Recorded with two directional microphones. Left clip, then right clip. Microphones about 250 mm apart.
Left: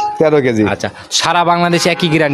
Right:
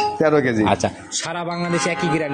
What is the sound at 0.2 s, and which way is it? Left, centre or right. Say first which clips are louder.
A man's voice: left 7 dB; left.